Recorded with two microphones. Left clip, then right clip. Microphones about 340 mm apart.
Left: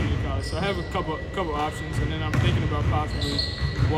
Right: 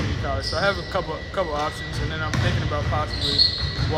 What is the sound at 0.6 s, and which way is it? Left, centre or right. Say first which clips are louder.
Speech: right 3 dB; centre.